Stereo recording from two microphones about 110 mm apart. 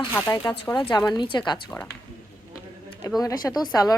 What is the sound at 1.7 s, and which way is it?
Speech, 20° left (ahead or behind).